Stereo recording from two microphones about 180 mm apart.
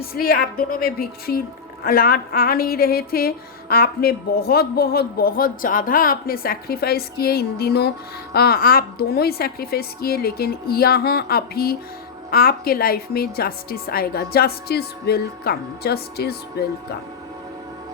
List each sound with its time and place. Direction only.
0.0 s a woman's voice: 55° left (ahead or behind)